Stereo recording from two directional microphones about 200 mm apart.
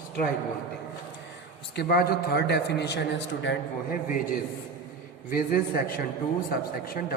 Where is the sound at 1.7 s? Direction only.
50° left (ahead or behind).